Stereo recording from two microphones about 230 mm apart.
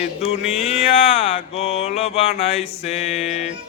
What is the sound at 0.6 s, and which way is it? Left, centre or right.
Music, left.